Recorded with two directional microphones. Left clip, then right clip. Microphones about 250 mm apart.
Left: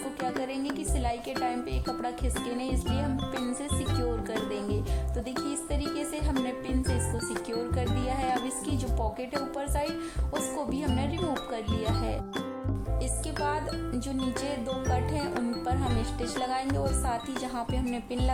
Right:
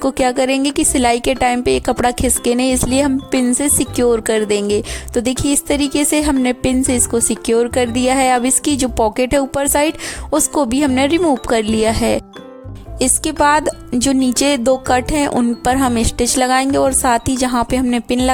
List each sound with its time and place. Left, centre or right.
0.1 s speech: right